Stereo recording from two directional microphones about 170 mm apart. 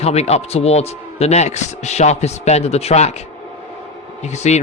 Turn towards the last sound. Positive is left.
turn(degrees=40)  # may be behind; listen again after turning